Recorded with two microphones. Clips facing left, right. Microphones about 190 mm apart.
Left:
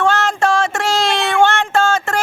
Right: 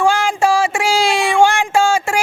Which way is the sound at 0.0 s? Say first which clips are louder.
Right 1 dB; 10° right (ahead or behind).